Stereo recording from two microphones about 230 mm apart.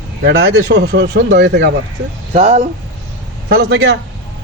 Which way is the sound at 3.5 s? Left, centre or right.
Right.